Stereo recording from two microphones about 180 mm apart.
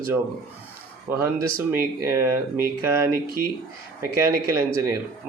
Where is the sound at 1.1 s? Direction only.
10° right (ahead or behind).